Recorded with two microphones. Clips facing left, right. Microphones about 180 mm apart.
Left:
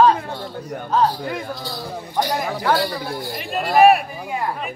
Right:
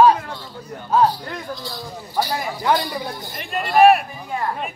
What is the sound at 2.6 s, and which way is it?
Speech, 20° right (ahead or behind).